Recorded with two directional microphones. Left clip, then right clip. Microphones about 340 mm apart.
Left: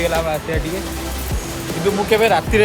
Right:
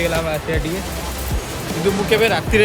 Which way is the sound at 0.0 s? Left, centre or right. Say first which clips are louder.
Left 1 dB; centre.